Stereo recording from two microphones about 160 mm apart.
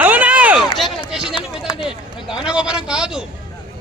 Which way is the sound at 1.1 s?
5° right (ahead or behind).